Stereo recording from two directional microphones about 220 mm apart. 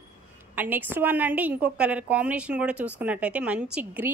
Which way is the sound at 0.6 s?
10° right (ahead or behind).